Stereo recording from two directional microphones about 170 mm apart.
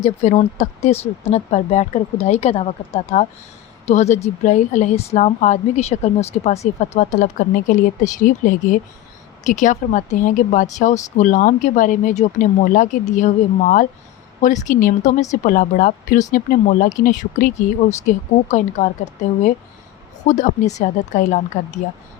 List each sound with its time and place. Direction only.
0.0 s a woman's voice: 40° left (ahead or behind)
20.2 s a woman's voice: 45° left (ahead or behind)